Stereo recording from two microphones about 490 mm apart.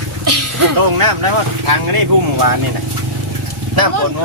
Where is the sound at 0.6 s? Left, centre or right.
Right.